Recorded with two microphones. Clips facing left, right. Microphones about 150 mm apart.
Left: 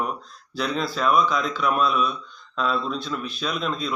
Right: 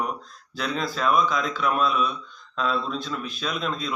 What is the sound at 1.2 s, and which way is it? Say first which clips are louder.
A man's voice: left 1 dB; 40° right (ahead or behind).